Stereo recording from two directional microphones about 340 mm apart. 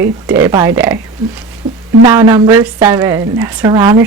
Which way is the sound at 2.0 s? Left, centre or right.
Centre.